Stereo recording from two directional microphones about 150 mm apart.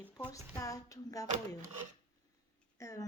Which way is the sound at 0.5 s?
25° left (ahead or behind).